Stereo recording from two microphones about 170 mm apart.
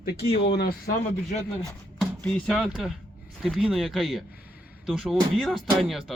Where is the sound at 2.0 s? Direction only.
5° left (ahead or behind).